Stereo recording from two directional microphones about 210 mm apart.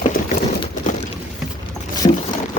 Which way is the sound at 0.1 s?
40° left (ahead or behind).